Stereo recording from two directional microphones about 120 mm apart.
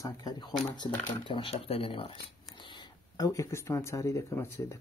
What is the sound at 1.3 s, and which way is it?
Speech, 45° left (ahead or behind).